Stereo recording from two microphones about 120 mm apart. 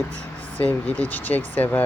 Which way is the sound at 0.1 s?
10° left (ahead or behind).